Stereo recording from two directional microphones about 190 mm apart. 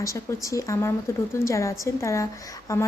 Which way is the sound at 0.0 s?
15° left (ahead or behind).